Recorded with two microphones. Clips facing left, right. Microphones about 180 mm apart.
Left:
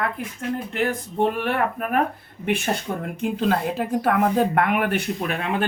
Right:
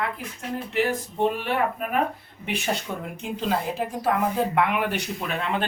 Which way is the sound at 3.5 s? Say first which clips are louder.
Left 1 dB; 60° left (ahead or behind).